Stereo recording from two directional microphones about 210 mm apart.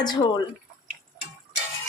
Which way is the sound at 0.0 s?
20° left (ahead or behind).